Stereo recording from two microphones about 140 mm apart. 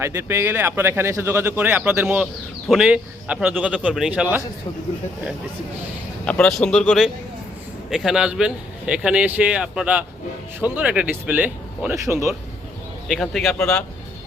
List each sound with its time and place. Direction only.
0.0 s speech: 20° right (ahead or behind)
6.2 s speech: 10° left (ahead or behind); by 11.9 s 10° right (ahead or behind)
13.1 s a man's voice: centre (ahead or behind)